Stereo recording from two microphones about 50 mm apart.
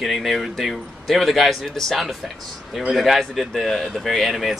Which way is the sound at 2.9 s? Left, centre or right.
Centre.